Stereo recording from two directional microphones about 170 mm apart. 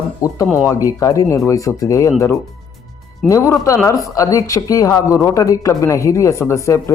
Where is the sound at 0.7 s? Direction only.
20° left (ahead or behind).